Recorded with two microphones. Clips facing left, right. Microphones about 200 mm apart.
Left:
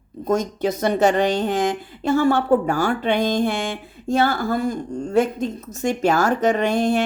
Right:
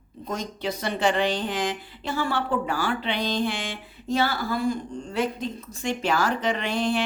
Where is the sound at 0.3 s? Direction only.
45° left (ahead or behind).